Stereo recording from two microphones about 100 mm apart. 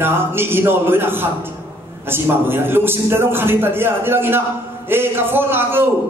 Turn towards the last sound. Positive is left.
turn(degrees=-20)  # may be behind; listen again after turning